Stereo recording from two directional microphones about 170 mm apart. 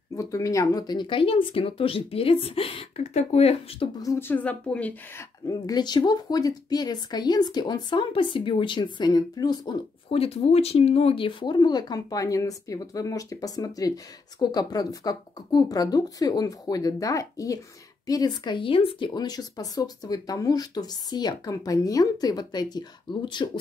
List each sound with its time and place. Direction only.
0.1 s speech: 20° left (ahead or behind); by 3.9 s 40° left (ahead or behind)
4.0 s a woman's voice: 15° left (ahead or behind)
5.5 s speech: 25° left (ahead or behind)
10.0 s speech: 35° left (ahead or behind)